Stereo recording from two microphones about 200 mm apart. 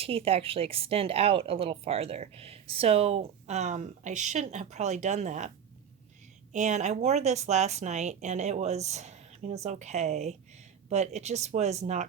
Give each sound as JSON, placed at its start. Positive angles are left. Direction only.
{"t": 0.0, "sound": "speech", "side_deg": -30}
{"t": 6.5, "sound": "speech", "side_deg": -35}